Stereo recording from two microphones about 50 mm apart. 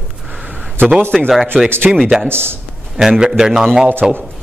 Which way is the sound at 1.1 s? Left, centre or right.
Centre.